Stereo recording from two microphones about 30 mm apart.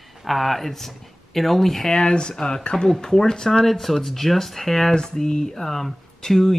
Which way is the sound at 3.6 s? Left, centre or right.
Centre.